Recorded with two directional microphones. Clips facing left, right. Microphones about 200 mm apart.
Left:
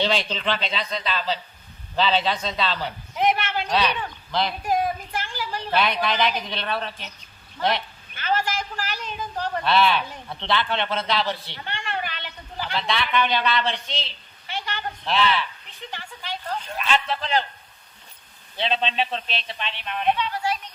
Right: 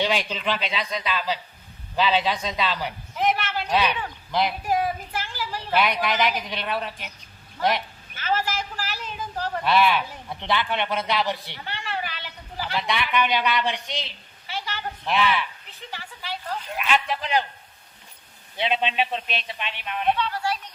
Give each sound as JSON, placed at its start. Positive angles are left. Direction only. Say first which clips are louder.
{"t": 0.0, "sound": "a man's voice", "louder": "left 1 dB", "side_deg": -10}
{"t": 3.2, "sound": "a sound", "louder": "left 1 dB", "side_deg": -5}
{"t": 3.8, "sound": "a man's voice", "louder": "right 1 dB", "side_deg": -15}
{"t": 18.5, "sound": "a man's voice", "louder": "even", "side_deg": -15}
{"t": 20.1, "sound": "speech", "louder": "even", "side_deg": 20}